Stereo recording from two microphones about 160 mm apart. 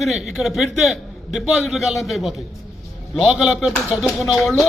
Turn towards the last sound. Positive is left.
turn(degrees=0)  # may be behind; listen again after turning